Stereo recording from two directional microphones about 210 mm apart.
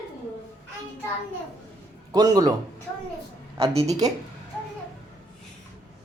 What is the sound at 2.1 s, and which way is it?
Speech, 20° right (ahead or behind).